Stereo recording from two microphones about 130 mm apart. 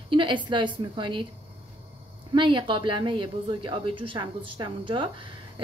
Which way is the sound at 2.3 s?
40° right (ahead or behind).